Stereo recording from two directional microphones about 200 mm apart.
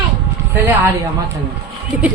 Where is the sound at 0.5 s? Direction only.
10° right (ahead or behind).